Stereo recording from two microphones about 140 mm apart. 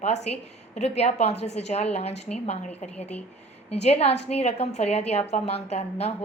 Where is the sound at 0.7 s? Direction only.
50° left (ahead or behind).